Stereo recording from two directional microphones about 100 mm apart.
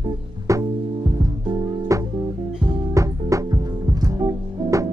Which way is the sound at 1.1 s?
45° right (ahead or behind).